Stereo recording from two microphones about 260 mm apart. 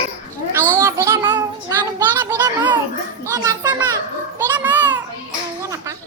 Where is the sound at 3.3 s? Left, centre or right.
Centre.